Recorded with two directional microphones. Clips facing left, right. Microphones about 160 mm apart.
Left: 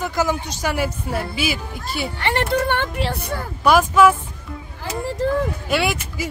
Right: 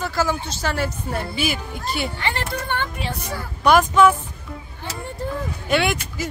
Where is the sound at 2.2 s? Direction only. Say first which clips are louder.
Left 6 dB; 65° left (ahead or behind).